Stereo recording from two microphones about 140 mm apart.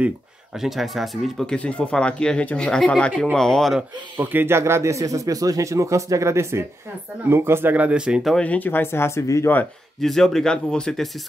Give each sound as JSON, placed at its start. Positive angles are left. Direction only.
{"t": 0.6, "sound": "speech", "side_deg": 0}
{"t": 4.2, "sound": "speech", "side_deg": -15}
{"t": 9.9, "sound": "speech", "side_deg": 0}